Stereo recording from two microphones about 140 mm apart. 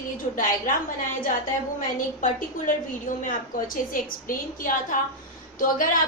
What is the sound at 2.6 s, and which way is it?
A woman's voice, 70° left (ahead or behind).